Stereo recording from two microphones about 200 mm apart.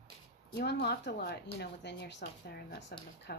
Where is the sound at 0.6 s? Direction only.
55° left (ahead or behind).